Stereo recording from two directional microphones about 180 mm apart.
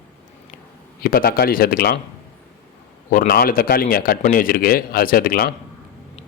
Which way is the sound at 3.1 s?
55° left (ahead or behind).